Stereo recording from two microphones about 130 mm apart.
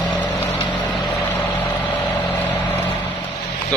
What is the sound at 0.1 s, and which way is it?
Vehicle, 10° left (ahead or behind).